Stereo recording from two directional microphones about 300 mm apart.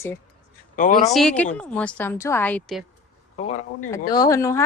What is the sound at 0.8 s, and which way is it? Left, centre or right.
Speech, left.